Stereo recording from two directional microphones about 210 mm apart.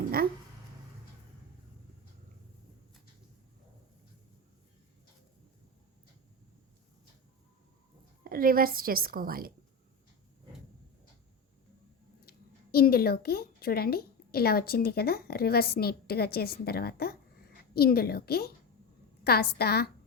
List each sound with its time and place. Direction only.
8.2 s a woman's voice: 45° right (ahead or behind)
12.7 s a woman's voice: 45° left (ahead or behind)